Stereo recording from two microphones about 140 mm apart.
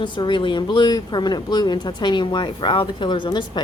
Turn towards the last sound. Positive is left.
turn(degrees=35)  # may be behind; listen again after turning